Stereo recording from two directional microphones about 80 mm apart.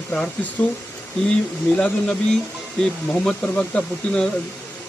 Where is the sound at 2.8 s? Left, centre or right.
Centre.